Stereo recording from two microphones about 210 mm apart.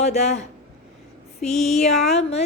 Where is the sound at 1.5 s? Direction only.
30° left (ahead or behind).